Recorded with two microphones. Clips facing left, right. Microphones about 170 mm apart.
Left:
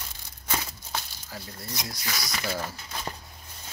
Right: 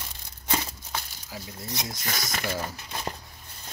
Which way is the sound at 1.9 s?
45° right (ahead or behind).